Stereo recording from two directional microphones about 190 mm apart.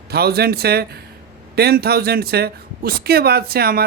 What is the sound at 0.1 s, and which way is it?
A man's voice, 55° right (ahead or behind).